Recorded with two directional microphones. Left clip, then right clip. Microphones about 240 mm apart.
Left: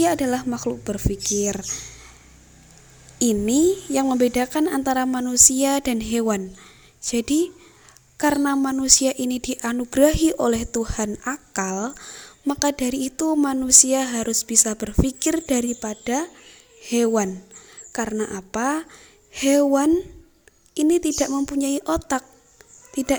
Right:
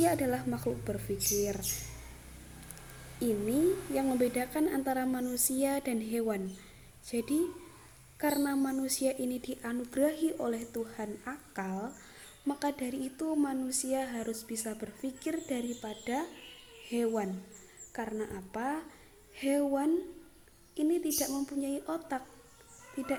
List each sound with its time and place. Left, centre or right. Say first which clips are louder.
0.0 s a woman's voice: left 9 dB; left
3.2 s a woman's voice: left 11 dB; left